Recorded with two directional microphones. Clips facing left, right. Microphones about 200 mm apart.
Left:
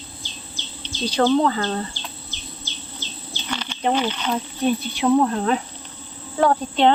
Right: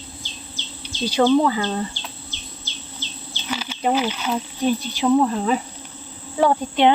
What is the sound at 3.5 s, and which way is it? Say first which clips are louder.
Speech: right 1 dB; 5° right (ahead or behind).